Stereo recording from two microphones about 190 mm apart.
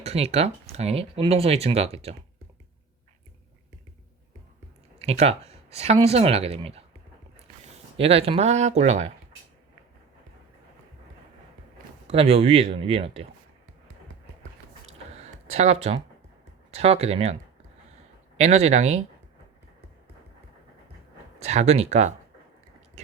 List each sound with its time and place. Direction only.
0.0 s speech: 35° right (ahead or behind)
4.9 s speech: 35° right (ahead or behind)
7.9 s speech: 30° right (ahead or behind)
12.0 s speech: 30° right (ahead or behind)
15.4 s speech: 35° right (ahead or behind)
18.3 s speech: 35° right (ahead or behind)
21.3 s speech: 35° right (ahead or behind)